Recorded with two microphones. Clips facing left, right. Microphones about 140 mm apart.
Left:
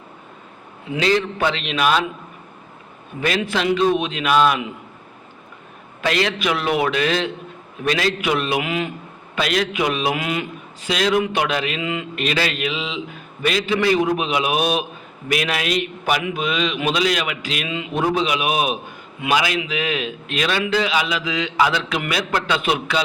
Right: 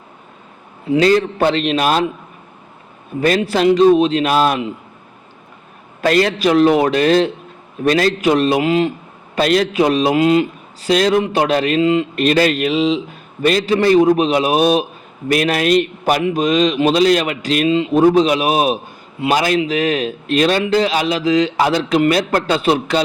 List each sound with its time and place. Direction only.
0.9 s a man's voice: 40° right (ahead or behind)
3.2 s a man's voice: 40° right (ahead or behind)
6.0 s a man's voice: 40° right (ahead or behind)